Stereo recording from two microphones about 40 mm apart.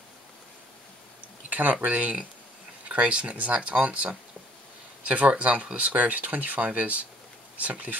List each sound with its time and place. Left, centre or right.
1.5 s speech: right